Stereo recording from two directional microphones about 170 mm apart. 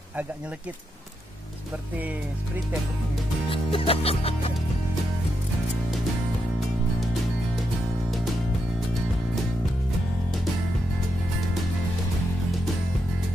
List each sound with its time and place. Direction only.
3.4 s music: 30° left (ahead or behind)